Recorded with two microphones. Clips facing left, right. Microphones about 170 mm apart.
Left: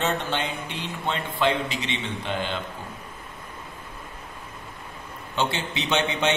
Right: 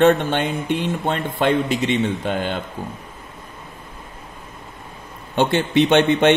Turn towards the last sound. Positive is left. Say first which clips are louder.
# right 10 dB
turn(degrees=-55)  # may be behind; listen again after turning